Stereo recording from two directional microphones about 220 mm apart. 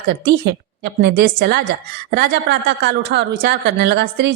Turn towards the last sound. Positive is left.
turn(degrees=-50)  # may be behind; listen again after turning